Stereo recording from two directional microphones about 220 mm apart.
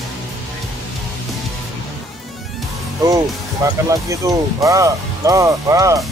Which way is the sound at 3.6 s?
15° right (ahead or behind).